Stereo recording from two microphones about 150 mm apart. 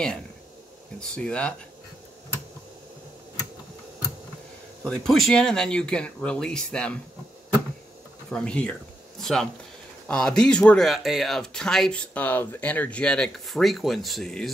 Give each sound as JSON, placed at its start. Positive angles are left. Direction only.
{"t": 0.9, "sound": "speech", "side_deg": 5}
{"t": 4.8, "sound": "speech", "side_deg": 5}
{"t": 8.3, "sound": "speech", "side_deg": 5}